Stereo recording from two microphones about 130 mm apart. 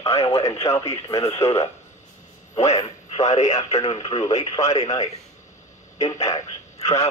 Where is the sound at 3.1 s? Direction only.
65° left (ahead or behind).